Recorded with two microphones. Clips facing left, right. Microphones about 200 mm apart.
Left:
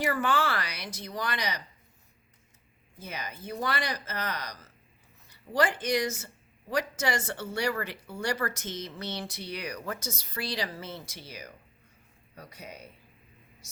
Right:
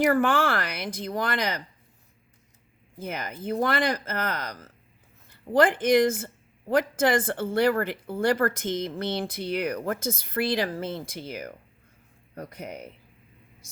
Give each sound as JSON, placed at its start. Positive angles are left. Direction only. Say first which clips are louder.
{"t": 0.1, "sound": "speech", "louder": "right 6 dB", "side_deg": -55}
{"t": 3.0, "sound": "speech", "louder": "right 6 dB", "side_deg": -55}